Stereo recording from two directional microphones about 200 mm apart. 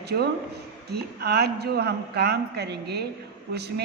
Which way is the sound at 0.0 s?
55° right (ahead or behind).